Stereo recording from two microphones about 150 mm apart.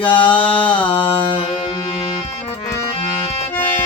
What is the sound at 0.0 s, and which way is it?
Mantra, 35° left (ahead or behind).